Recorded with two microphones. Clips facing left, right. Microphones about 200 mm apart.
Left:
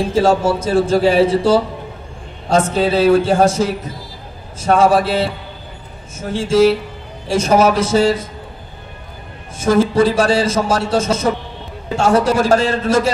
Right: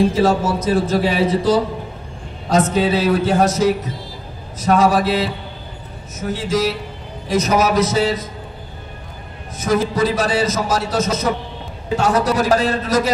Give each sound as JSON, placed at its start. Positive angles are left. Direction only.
{"t": 0.1, "sound": "a man's voice", "side_deg": 30}
{"t": 2.7, "sound": "a man's voice", "side_deg": 30}
{"t": 9.6, "sound": "a man's voice", "side_deg": 30}